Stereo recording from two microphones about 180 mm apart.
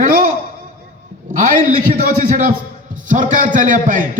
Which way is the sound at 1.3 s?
45° right (ahead or behind).